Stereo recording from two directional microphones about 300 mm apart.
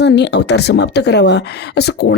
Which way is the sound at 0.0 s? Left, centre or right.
Left.